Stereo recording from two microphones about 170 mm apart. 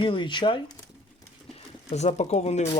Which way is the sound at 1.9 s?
40° left (ahead or behind).